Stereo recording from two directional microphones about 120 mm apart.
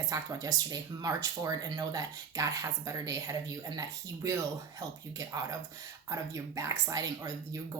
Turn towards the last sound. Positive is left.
turn(degrees=-30)  # may be behind; listen again after turning